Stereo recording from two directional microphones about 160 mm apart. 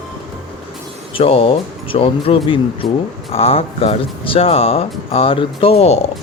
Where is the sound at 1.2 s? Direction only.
35° left (ahead or behind).